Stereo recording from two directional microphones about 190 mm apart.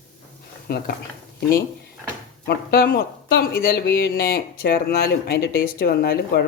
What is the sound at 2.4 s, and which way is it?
Speech, 55° left (ahead or behind).